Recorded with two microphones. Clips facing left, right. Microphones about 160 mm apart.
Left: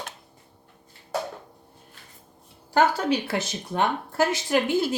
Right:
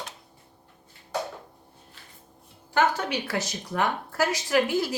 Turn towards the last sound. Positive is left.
turn(degrees=25)  # may be behind; listen again after turning